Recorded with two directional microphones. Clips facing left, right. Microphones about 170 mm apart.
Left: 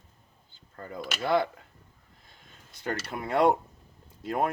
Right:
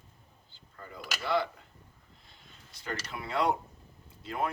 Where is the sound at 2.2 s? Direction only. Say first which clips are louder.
Left 3 dB; 50° left (ahead or behind).